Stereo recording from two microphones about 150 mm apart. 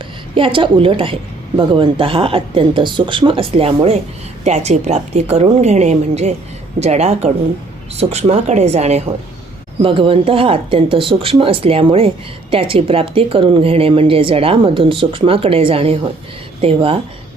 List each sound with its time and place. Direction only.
0.3 s a woman's voice: 35° right (ahead or behind)
9.8 s speech: 35° right (ahead or behind)